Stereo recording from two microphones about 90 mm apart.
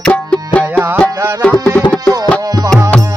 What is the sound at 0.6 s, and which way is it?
Music, 20° right (ahead or behind).